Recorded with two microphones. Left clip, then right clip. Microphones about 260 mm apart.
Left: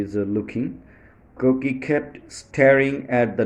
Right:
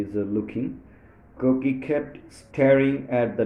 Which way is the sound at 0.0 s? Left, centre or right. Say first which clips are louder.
Left 2 dB; left.